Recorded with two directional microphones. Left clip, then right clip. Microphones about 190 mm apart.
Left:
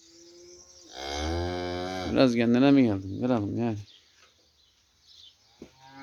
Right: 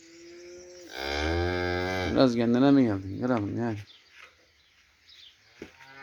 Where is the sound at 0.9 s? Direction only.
70° left (ahead or behind).